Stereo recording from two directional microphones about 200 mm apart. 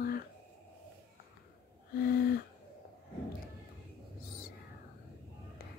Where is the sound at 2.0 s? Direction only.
50° left (ahead or behind).